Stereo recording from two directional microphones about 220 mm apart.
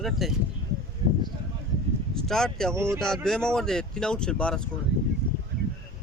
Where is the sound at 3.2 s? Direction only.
5° left (ahead or behind).